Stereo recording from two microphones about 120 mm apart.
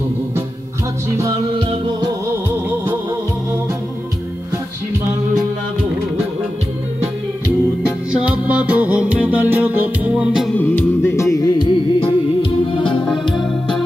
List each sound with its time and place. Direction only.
1.6 s music: 45° right (ahead or behind)
8.1 s music: 10° right (ahead or behind)
10.5 s music: 15° left (ahead or behind)
12.0 s music: 45° left (ahead or behind)